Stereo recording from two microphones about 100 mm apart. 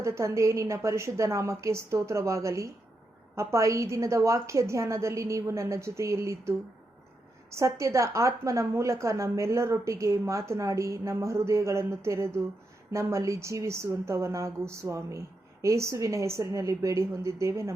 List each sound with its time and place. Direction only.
0.0 s a woman's voice: 30° right (ahead or behind)
7.5 s a woman's voice: 30° right (ahead or behind)